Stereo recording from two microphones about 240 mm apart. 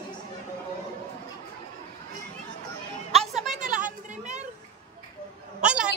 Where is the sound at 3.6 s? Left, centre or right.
Right.